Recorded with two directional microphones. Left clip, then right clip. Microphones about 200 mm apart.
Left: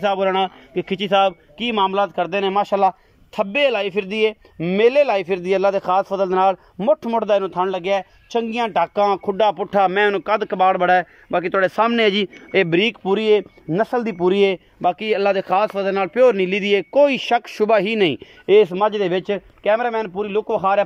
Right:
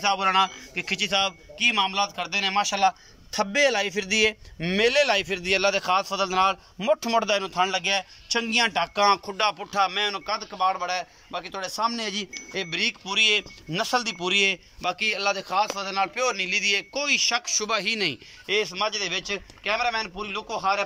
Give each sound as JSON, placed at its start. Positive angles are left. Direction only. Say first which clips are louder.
{"t": 0.0, "sound": "a man's voice", "louder": "left 3 dB", "side_deg": 45}
{"t": 3.3, "sound": "a man's voice", "louder": "left 4 dB", "side_deg": 15}